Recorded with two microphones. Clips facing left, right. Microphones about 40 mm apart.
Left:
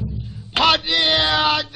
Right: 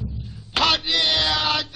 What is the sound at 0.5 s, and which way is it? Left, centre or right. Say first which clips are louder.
Speech: left 4 dB; centre.